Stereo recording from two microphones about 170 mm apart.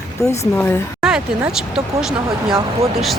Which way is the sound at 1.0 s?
5° right (ahead or behind).